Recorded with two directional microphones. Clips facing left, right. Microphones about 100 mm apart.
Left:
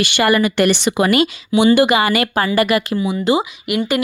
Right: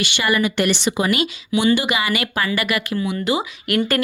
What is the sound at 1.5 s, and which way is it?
Speech, 30° left (ahead or behind).